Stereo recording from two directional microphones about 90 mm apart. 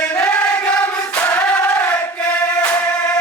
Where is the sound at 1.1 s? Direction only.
20° left (ahead or behind).